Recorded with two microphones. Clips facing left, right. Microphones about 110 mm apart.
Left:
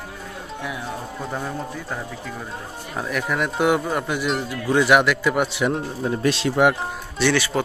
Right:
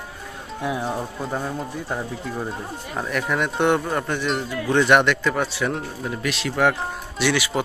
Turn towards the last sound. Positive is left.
turn(degrees=-10)  # may be behind; listen again after turning